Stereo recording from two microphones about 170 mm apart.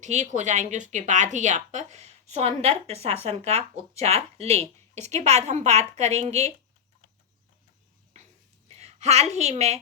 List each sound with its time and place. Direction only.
0.0 s speech: 45° right (ahead or behind)
8.7 s a woman's voice: 40° right (ahead or behind)